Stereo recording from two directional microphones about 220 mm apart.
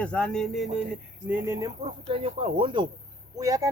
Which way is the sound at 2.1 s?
25° right (ahead or behind).